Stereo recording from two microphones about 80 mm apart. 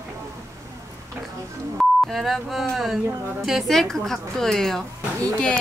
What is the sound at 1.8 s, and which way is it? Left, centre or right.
A woman's voice, centre.